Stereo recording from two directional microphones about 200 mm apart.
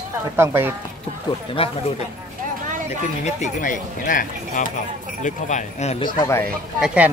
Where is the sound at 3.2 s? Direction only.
40° left (ahead or behind).